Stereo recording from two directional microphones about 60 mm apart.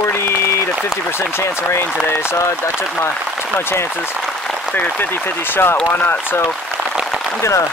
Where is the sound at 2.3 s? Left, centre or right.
Left.